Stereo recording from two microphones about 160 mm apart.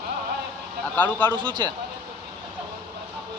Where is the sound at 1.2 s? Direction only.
30° right (ahead or behind).